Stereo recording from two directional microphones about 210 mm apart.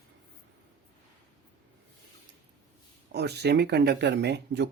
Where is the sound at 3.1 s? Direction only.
50° right (ahead or behind).